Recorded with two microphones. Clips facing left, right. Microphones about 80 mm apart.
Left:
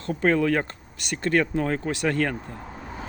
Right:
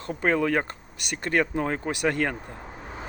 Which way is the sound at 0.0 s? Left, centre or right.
Centre.